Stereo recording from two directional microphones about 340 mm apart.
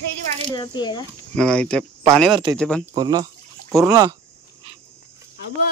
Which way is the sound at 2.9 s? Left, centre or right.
Centre.